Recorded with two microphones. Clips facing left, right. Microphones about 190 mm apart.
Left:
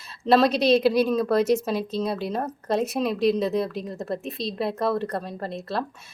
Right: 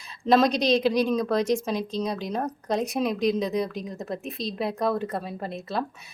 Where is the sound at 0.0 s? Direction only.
5° left (ahead or behind).